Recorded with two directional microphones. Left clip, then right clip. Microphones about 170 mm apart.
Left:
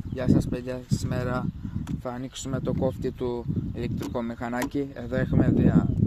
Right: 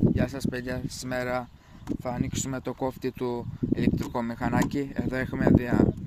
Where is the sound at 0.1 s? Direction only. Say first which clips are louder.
Left 3 dB; 45° right (ahead or behind).